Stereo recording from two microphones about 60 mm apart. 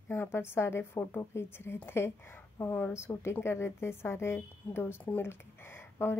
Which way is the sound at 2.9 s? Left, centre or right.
Left.